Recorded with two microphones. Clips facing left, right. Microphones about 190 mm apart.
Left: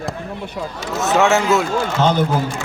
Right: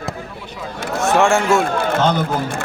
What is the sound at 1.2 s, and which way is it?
Speech, centre (ahead or behind).